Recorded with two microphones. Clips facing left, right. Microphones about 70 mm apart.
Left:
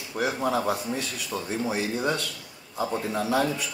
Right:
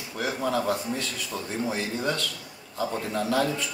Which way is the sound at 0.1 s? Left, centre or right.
Centre.